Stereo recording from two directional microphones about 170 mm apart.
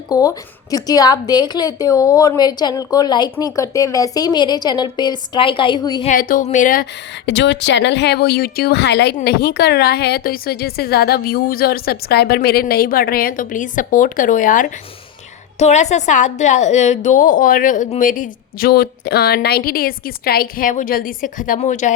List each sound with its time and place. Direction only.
0.1 s a woman's voice: 20° left (ahead or behind)
6.1 s a woman's voice: 55° left (ahead or behind)
7.3 s a woman's voice: 90° left
9.1 s a woman's voice: 70° left (ahead or behind); by 21.9 s 45° left (ahead or behind)